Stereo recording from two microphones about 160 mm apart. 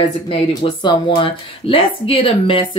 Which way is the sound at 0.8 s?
30° left (ahead or behind).